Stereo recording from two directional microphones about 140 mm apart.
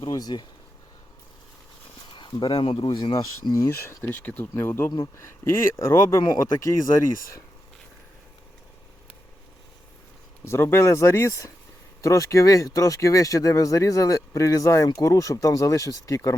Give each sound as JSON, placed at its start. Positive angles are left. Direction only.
{"t": 0.0, "sound": "speech", "side_deg": 25}
{"t": 2.1, "sound": "speech", "side_deg": 35}
{"t": 4.0, "sound": "speech", "side_deg": 15}
{"t": 10.4, "sound": "speech", "side_deg": 20}